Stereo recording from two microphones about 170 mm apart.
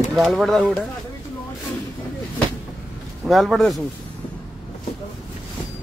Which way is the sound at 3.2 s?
Centre (ahead or behind).